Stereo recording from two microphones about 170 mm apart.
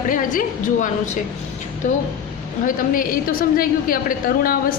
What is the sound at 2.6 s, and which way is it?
A woman's voice, 55° left (ahead or behind).